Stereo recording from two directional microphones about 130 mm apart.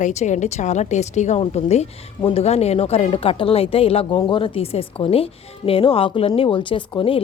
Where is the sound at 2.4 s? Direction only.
55° left (ahead or behind).